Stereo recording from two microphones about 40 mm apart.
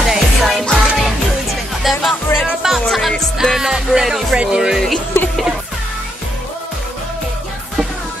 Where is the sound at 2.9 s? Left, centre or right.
Centre.